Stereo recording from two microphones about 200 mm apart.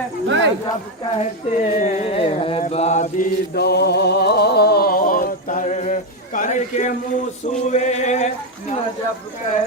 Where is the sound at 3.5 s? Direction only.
55° left (ahead or behind); by 6.9 s 35° left (ahead or behind).